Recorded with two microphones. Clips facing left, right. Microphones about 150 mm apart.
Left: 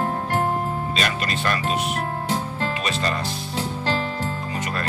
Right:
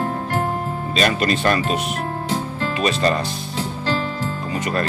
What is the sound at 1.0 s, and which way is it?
Speech, 30° right (ahead or behind).